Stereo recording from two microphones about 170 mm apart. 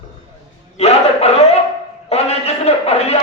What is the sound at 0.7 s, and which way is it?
Speech, 35° left (ahead or behind).